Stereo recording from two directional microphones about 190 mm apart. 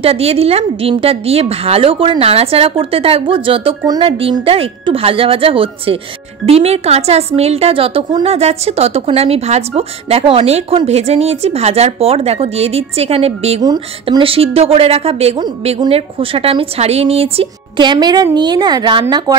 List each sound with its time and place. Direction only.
0.0 s a woman's voice: 30° right (ahead or behind)
13.6 s a woman's voice: 20° right (ahead or behind)